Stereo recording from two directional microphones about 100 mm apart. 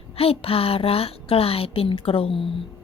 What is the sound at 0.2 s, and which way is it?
A woman's voice, 70° left (ahead or behind).